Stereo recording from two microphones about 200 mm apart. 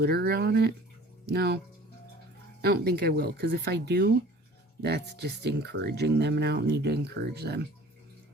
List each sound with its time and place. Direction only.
0.0 s speech: 50° right (ahead or behind)
2.6 s speech: 55° right (ahead or behind)